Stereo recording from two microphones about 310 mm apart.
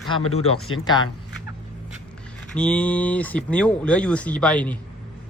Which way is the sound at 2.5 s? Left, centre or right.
Centre.